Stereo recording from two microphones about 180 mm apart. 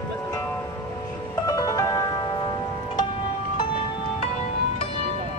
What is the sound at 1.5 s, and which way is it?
Music, 20° left (ahead or behind).